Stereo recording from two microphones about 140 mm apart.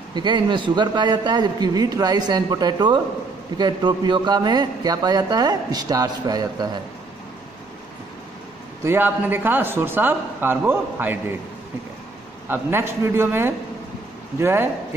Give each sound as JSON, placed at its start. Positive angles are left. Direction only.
{"t": 0.1, "sound": "a man's voice", "side_deg": -35}
{"t": 8.8, "sound": "speech", "side_deg": -15}
{"t": 12.4, "sound": "speech", "side_deg": -15}